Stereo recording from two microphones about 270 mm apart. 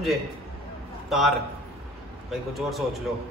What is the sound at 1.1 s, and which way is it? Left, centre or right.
A man's voice, centre.